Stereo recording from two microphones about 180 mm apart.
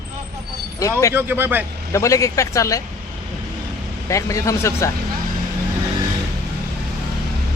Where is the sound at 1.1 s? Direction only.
10° right (ahead or behind).